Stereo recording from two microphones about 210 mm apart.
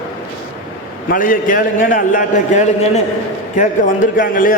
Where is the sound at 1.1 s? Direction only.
40° left (ahead or behind).